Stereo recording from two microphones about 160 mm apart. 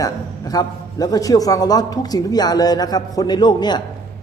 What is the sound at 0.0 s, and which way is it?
A woman's voice, 25° left (ahead or behind).